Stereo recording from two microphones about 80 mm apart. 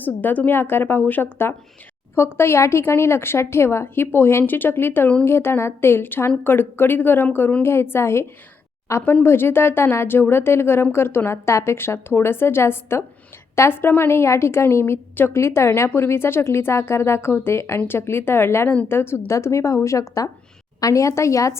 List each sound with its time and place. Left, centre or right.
0.0 s a woman's voice: left